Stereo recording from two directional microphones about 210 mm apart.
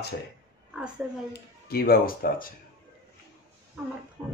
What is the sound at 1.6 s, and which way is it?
Speech, 45° left (ahead or behind).